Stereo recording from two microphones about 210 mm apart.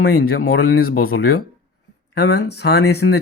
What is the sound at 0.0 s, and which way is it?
Speech, 45° left (ahead or behind).